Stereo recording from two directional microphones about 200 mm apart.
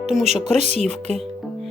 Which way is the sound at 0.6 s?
35° right (ahead or behind).